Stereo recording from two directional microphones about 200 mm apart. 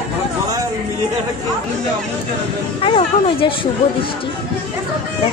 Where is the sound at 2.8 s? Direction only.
25° left (ahead or behind).